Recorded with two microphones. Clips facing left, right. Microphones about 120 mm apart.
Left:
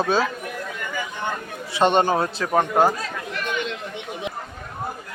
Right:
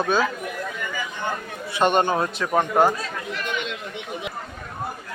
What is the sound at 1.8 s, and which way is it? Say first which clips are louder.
A man's voice: left 1 dB; 30° left (ahead or behind).